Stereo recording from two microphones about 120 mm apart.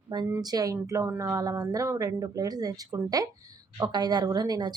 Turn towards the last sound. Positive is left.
turn(degrees=-35)  # may be behind; listen again after turning